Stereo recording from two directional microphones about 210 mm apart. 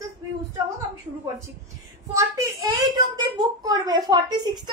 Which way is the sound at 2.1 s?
15° right (ahead or behind).